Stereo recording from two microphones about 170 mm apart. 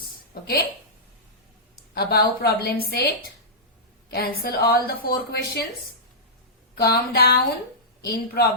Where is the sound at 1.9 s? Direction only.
65° left (ahead or behind).